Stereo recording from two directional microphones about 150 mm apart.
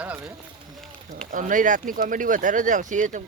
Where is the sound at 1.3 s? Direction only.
60° right (ahead or behind).